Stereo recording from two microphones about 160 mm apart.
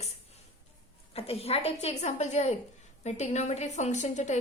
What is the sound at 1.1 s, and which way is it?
A woman's voice, 40° left (ahead or behind).